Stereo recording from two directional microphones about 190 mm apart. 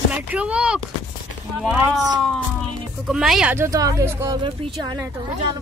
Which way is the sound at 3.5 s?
15° right (ahead or behind).